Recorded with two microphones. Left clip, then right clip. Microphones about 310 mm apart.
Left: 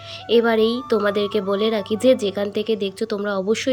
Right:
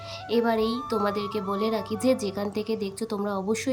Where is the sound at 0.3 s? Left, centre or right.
Centre.